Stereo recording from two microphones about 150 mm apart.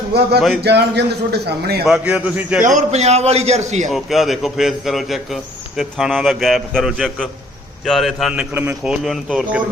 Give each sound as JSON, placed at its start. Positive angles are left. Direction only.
{"t": 0.3, "sound": "a man's voice", "side_deg": 0}
{"t": 0.6, "sound": "a man's voice", "side_deg": -90}
{"t": 1.9, "sound": "a man's voice", "side_deg": -5}
{"t": 2.6, "sound": "a man's voice", "side_deg": -60}
{"t": 3.8, "sound": "a man's voice", "side_deg": 0}